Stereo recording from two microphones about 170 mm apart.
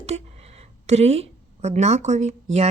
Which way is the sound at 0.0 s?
40° right (ahead or behind).